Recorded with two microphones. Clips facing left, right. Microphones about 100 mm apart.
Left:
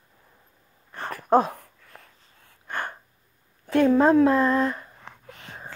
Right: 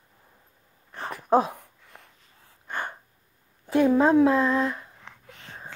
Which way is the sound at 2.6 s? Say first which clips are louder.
Left 1 dB; 5° right (ahead or behind).